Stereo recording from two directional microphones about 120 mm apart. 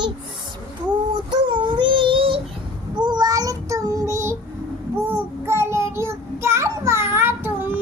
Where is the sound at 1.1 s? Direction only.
40° right (ahead or behind).